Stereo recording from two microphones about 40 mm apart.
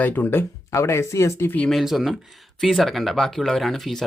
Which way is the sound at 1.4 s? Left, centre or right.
Left.